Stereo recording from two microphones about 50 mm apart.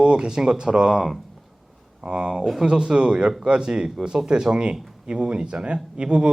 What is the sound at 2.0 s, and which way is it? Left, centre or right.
A man's voice, centre.